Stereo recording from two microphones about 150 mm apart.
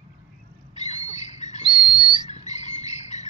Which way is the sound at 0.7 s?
50° left (ahead or behind).